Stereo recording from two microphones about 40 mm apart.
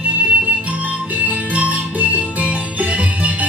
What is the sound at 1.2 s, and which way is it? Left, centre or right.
Music, right.